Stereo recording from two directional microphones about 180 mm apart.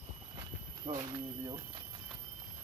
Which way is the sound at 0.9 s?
20° right (ahead or behind).